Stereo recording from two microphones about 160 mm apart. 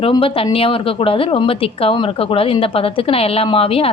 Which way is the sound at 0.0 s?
35° left (ahead or behind).